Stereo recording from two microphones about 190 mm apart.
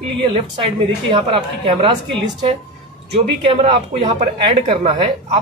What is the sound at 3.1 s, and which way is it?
Speech, 25° right (ahead or behind).